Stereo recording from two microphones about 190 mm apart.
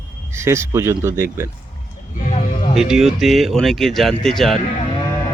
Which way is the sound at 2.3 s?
35° left (ahead or behind).